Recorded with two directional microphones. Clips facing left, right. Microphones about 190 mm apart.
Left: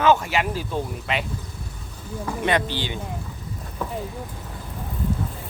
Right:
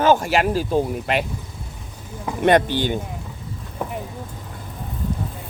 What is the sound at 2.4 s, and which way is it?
Speech, 50° right (ahead or behind).